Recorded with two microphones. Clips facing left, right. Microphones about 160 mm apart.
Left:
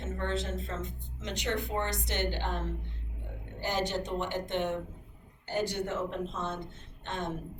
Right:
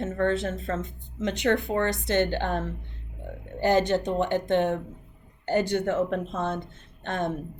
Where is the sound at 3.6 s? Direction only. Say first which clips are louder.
Right 10 dB; 55° right (ahead or behind).